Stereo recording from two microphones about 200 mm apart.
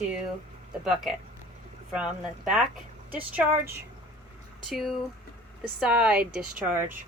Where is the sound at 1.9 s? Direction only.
Centre (ahead or behind).